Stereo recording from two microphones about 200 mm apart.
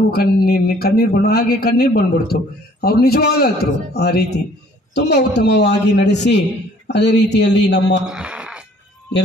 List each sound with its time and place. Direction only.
0.1 s a man's voice: 50° left (ahead or behind)
8.1 s wail: 5° right (ahead or behind)